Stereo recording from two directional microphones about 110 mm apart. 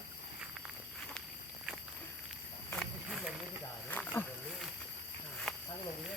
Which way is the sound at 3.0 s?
5° right (ahead or behind).